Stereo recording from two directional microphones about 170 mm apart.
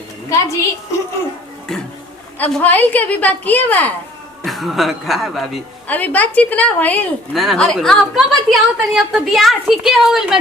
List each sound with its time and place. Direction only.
0.3 s a woman's voice: 15° left (ahead or behind)
1.7 s a sound: 5° left (ahead or behind)
2.4 s a woman's voice: 10° left (ahead or behind)